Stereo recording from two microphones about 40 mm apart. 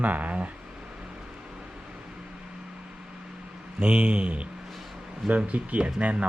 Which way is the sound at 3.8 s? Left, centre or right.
Right.